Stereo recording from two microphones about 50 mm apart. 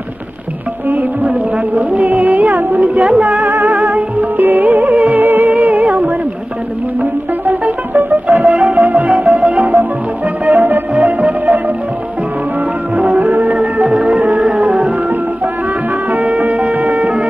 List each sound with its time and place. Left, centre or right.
0.8 s music: right
8.5 s music: right
12.9 s music: right
16.1 s music: right